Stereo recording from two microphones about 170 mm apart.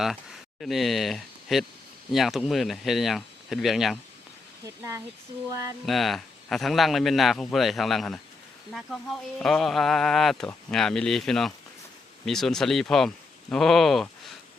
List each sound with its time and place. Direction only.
0.6 s a man's voice: centre (ahead or behind)
4.6 s speech: 20° right (ahead or behind)
5.8 s a man's voice: centre (ahead or behind)
9.4 s a man's voice: centre (ahead or behind)